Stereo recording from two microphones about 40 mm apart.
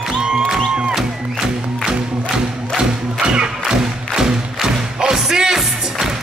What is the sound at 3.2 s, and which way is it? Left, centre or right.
Music, right.